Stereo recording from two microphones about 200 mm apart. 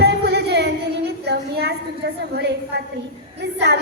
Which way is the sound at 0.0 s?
55° right (ahead or behind).